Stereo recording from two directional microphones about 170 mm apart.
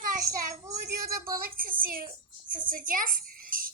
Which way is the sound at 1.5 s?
60° right (ahead or behind).